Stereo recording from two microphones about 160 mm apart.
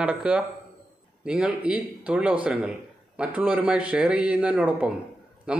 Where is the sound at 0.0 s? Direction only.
5° right (ahead or behind).